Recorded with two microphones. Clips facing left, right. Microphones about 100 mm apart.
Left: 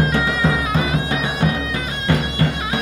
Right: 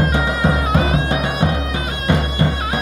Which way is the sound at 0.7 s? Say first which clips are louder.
Right 3 dB; 55° right (ahead or behind).